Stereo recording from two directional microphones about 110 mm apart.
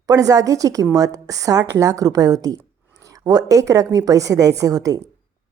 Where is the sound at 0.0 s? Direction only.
35° right (ahead or behind).